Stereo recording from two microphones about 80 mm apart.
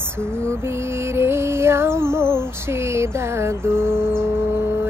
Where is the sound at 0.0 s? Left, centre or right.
Right.